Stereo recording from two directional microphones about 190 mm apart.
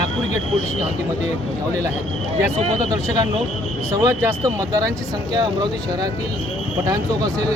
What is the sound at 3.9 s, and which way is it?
Speech, 15° right (ahead or behind).